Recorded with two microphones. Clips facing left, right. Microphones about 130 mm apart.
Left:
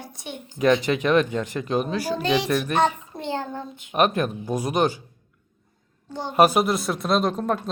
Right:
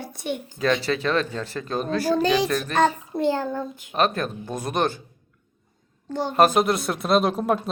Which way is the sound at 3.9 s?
15° left (ahead or behind).